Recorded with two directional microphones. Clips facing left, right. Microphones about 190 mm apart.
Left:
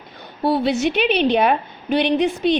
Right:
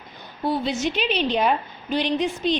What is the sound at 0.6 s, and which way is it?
A woman's voice, 60° left (ahead or behind).